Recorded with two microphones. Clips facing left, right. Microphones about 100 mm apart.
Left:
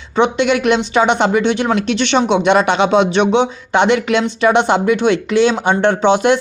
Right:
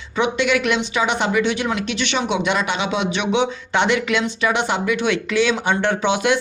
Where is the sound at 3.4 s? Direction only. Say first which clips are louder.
Left 5 dB; 20° left (ahead or behind).